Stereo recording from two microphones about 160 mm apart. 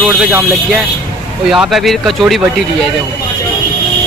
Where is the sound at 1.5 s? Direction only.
5° right (ahead or behind).